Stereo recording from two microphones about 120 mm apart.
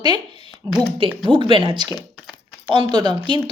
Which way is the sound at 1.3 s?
45° right (ahead or behind).